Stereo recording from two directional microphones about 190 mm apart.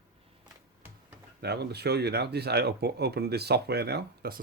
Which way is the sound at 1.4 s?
60° right (ahead or behind).